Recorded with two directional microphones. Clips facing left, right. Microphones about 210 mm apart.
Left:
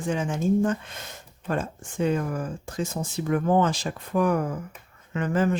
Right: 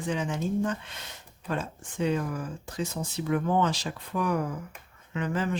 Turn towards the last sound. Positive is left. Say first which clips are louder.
# left 5 dB
turn(degrees=45)  # may be behind; listen again after turning